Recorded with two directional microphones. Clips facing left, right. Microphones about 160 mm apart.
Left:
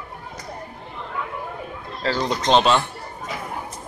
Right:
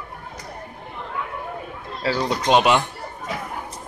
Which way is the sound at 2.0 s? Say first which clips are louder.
Even; 10° right (ahead or behind).